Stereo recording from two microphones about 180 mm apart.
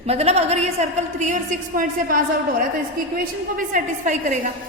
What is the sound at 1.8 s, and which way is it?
A woman's voice, 50° right (ahead or behind).